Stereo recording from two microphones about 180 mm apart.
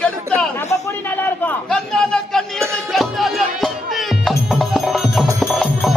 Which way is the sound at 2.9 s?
Centre (ahead or behind).